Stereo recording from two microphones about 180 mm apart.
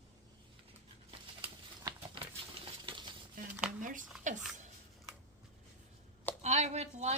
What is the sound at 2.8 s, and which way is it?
Stir, 25° right (ahead or behind).